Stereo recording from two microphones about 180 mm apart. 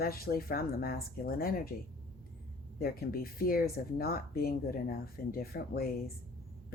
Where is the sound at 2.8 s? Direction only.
55° left (ahead or behind).